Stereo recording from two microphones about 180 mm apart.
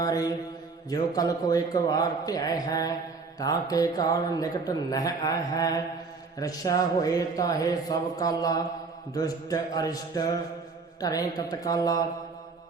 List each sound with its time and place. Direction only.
0.0 s speech: 20° left (ahead or behind)